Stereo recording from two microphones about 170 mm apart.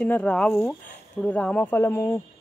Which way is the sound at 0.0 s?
5° left (ahead or behind).